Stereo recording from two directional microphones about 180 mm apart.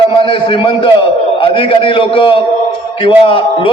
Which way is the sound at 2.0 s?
30° left (ahead or behind).